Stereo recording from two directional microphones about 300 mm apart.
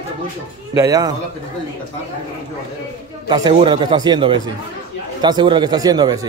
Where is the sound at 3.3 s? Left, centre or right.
Centre.